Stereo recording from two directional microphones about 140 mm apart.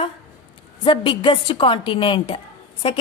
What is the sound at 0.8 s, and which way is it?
A woman's voice, 35° left (ahead or behind).